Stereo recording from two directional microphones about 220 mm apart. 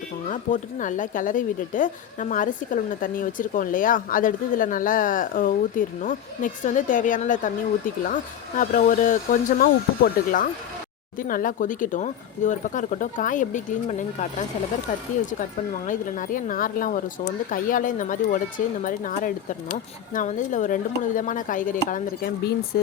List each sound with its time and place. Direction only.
0.3 s speech: 35° left (ahead or behind)
15.9 s speech: 35° left (ahead or behind)